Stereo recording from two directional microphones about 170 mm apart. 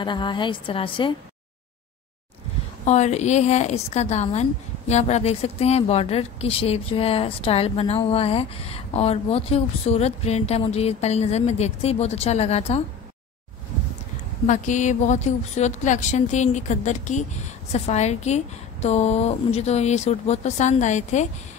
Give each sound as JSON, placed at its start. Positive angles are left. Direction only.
{"t": 0.0, "sound": "a woman's voice", "side_deg": 30}
{"t": 2.8, "sound": "a woman's voice", "side_deg": 40}
{"t": 14.4, "sound": "a woman's voice", "side_deg": 45}